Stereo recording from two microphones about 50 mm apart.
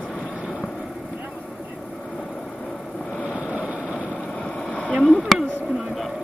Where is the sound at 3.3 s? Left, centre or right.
Right.